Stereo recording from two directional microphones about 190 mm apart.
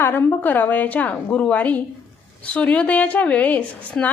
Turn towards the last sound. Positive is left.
turn(degrees=5)  # may be behind; listen again after turning